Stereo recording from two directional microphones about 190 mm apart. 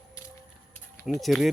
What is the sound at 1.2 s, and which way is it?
Speech, centre (ahead or behind).